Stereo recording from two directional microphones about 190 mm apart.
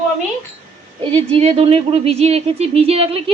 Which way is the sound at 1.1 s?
30° right (ahead or behind).